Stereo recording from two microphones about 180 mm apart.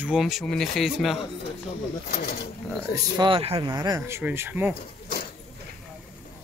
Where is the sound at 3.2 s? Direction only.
30° right (ahead or behind); by 4.7 s 10° right (ahead or behind).